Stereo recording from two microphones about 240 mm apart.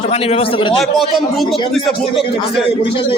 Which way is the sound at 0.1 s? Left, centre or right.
Left.